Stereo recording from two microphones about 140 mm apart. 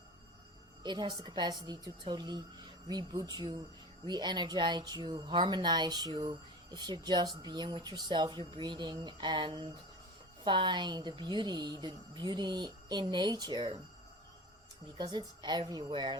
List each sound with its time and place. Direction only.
0.8 s speech: 30° right (ahead or behind)
14.9 s speech: 30° right (ahead or behind)